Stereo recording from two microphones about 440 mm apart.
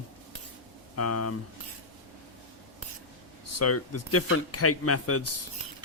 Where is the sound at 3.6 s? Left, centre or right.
Left.